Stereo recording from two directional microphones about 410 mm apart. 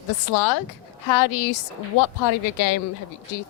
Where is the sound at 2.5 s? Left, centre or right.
Left.